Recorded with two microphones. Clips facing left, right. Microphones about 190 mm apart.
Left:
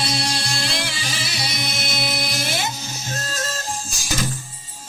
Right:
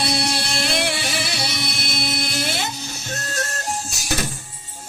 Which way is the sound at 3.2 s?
65° right (ahead or behind).